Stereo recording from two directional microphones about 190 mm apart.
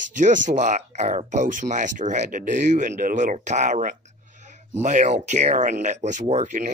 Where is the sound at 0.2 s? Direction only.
40° right (ahead or behind).